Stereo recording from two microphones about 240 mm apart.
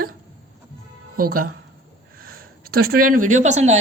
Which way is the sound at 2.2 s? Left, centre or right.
Right.